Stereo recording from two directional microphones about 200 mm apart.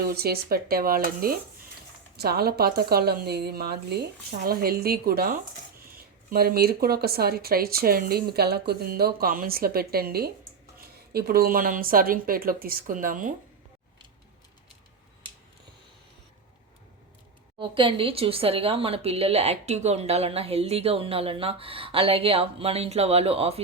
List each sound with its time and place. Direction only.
0.1 s speech: 50° right (ahead or behind)
17.6 s a woman's voice: 25° right (ahead or behind)